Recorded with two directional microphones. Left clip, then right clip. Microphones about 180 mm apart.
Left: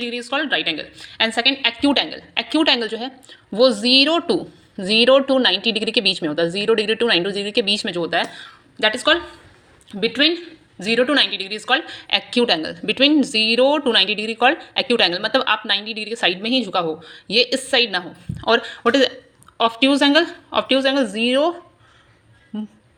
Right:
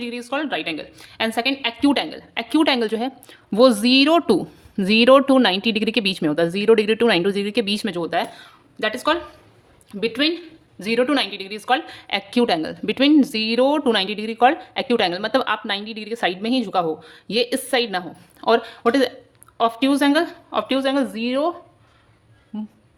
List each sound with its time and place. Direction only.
0.0 s a woman's voice: 15° right (ahead or behind)
22.5 s speech: 15° right (ahead or behind)